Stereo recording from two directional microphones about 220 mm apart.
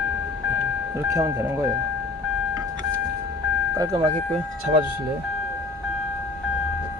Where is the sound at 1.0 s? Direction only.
15° right (ahead or behind).